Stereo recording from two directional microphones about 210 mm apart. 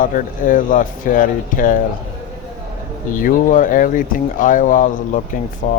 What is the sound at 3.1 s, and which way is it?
Speech, 40° left (ahead or behind).